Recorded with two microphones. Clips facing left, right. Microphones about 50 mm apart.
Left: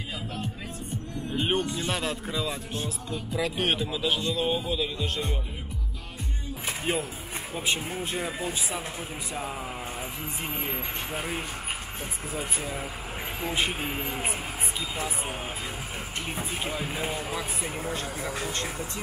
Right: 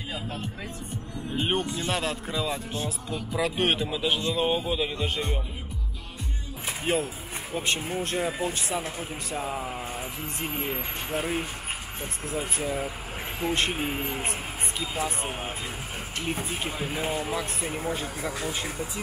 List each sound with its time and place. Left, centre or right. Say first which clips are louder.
1.3 s speech: even; centre
6.8 s speech: right 4 dB; centre